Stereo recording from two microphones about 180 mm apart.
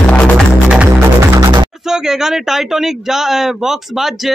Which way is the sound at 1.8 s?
5° right (ahead or behind).